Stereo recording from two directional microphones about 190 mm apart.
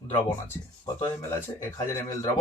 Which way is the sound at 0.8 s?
20° left (ahead or behind).